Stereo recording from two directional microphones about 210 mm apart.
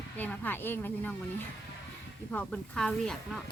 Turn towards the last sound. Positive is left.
turn(degrees=5)  # may be behind; listen again after turning